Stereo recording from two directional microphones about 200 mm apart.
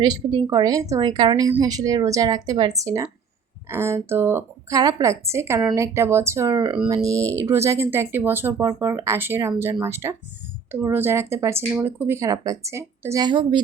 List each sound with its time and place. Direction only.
0.0 s a woman's voice: 20° right (ahead or behind)